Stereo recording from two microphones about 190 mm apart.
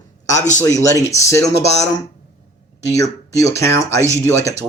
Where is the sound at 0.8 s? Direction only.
15° left (ahead or behind).